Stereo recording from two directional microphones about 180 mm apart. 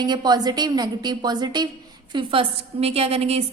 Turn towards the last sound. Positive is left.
turn(degrees=-35)  # may be behind; listen again after turning